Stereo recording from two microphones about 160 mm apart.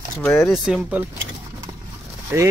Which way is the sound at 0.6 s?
5° right (ahead or behind).